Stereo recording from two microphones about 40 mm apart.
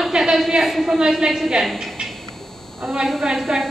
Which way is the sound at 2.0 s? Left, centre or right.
Right.